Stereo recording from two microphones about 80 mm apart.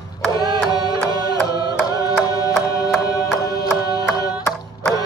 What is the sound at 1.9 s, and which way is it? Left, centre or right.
Music, left.